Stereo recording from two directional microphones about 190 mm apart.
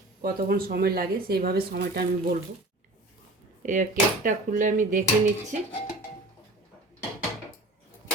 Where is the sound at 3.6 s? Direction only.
45° right (ahead or behind).